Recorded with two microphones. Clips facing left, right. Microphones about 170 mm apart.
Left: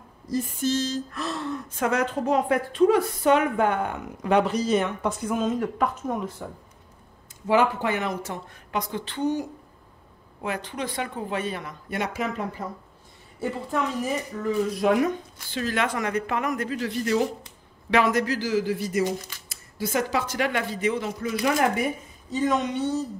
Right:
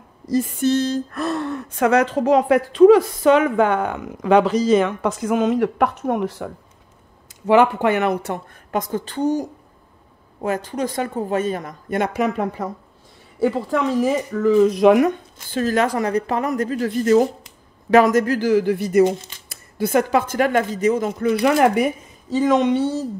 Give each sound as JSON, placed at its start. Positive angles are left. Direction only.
{"t": 0.3, "sound": "speech", "side_deg": -80}
{"t": 7.4, "sound": "speech", "side_deg": -65}
{"t": 13.4, "sound": "speech", "side_deg": -90}
{"t": 15.5, "sound": "speech", "side_deg": -40}
{"t": 21.2, "sound": "speech", "side_deg": -65}
{"t": 22.3, "sound": "speech", "side_deg": -90}